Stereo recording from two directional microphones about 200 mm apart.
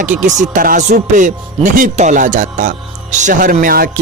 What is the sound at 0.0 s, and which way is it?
Speech, 40° right (ahead or behind).